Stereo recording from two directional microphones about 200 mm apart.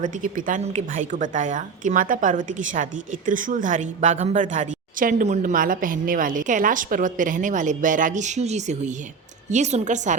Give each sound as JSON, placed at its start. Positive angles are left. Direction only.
{"t": 0.0, "sound": "a woman's voice", "side_deg": -40}